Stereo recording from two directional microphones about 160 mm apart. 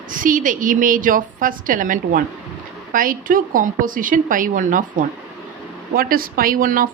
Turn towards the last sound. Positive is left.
turn(degrees=-60)  # may be behind; listen again after turning